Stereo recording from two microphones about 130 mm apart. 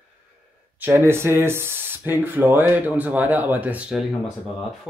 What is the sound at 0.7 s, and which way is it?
Speech, 15° right (ahead or behind).